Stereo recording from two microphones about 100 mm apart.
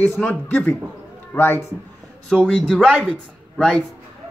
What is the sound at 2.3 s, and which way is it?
Speech, 10° left (ahead or behind).